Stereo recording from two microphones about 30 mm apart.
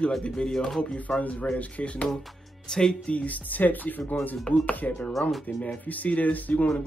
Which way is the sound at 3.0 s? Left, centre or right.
Left.